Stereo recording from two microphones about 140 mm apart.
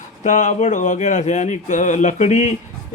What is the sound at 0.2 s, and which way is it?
A man's voice, 60° left (ahead or behind).